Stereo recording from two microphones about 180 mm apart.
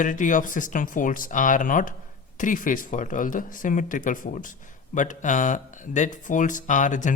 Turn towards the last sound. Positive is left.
turn(degrees=45)  # may be behind; listen again after turning